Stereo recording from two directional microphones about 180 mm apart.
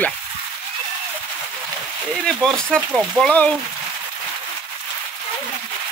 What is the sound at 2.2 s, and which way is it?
Speech, 5° left (ahead or behind).